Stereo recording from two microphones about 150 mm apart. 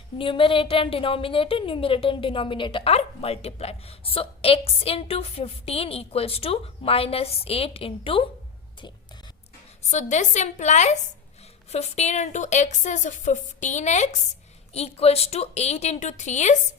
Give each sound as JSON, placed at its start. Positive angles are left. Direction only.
{"t": 0.2, "sound": "a woman's voice", "side_deg": 35}
{"t": 9.9, "sound": "speech", "side_deg": 55}